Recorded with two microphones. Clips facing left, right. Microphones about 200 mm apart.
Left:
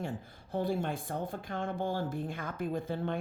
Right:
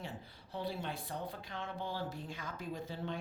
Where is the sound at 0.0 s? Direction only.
50° left (ahead or behind).